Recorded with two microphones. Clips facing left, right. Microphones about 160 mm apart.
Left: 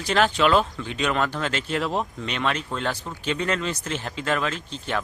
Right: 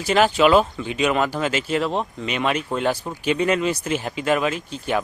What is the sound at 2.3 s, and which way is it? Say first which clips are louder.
Speech: right 5 dB; 10° right (ahead or behind).